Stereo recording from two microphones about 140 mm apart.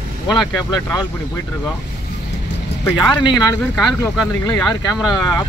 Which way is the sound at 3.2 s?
25° left (ahead or behind).